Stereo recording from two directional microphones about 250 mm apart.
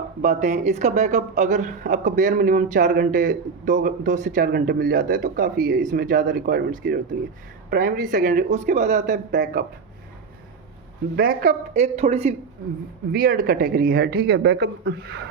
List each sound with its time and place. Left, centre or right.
0.2 s speech: right
11.2 s a woman's voice: right
13.1 s speech: right